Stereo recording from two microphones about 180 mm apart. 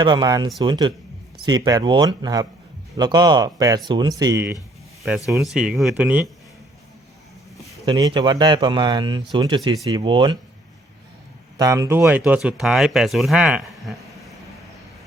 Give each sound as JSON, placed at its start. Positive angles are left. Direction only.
{"t": 0.0, "sound": "speech", "side_deg": -25}
{"t": 5.0, "sound": "speech", "side_deg": 0}
{"t": 7.9, "sound": "speech", "side_deg": -25}
{"t": 11.5, "sound": "speech", "side_deg": -20}